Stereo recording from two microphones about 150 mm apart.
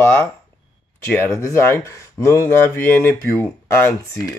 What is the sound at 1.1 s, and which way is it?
Speech, 15° left (ahead or behind).